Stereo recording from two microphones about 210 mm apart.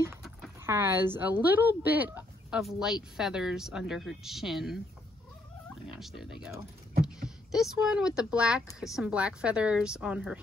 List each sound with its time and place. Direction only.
0.6 s speech: 10° right (ahead or behind)
5.9 s speech: centre (ahead or behind)
6.9 s heart sounds: 45° right (ahead or behind)
7.2 s speech: centre (ahead or behind)